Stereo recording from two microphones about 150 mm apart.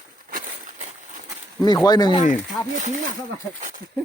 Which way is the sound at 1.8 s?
25° left (ahead or behind).